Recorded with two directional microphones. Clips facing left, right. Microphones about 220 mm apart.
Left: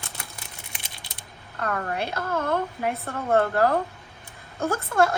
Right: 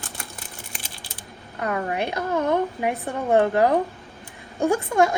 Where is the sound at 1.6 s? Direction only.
15° right (ahead or behind).